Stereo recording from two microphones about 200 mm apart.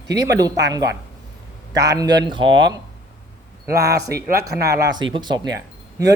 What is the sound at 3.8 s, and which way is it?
A man's voice, 15° right (ahead or behind).